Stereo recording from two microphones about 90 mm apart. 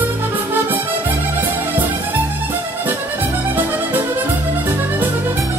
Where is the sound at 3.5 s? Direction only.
20° right (ahead or behind).